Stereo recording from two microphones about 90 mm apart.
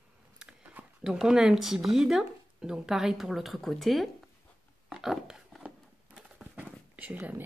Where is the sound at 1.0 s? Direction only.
5° right (ahead or behind).